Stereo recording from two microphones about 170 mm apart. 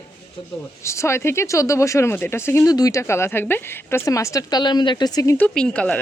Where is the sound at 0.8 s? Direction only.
15° left (ahead or behind).